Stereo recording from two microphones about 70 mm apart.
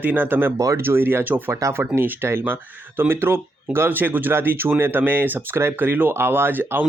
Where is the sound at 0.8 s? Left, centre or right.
Right.